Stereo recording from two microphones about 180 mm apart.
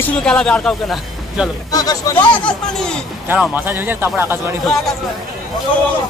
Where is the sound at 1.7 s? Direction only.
20° left (ahead or behind).